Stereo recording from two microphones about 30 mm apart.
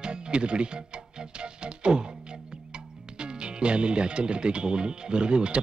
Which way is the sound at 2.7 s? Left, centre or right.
Right.